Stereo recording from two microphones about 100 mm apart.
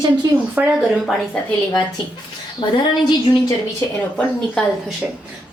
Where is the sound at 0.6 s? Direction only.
20° right (ahead or behind).